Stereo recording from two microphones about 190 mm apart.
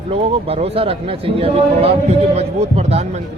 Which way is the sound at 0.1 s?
30° right (ahead or behind).